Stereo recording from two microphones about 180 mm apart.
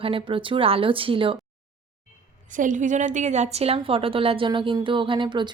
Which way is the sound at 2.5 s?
45° right (ahead or behind).